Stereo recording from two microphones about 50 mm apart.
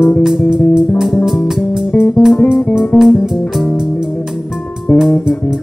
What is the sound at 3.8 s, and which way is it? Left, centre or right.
Music, centre.